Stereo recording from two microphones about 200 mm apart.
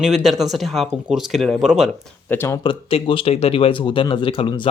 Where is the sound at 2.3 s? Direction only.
15° left (ahead or behind).